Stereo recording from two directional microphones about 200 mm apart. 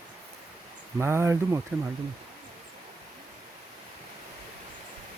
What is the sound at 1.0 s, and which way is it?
Speech, 10° right (ahead or behind).